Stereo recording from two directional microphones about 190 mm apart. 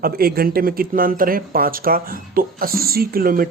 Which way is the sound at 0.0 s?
55° right (ahead or behind).